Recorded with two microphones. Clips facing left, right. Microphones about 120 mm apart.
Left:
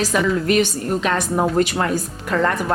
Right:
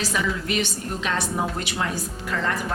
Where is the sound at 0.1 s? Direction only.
50° left (ahead or behind).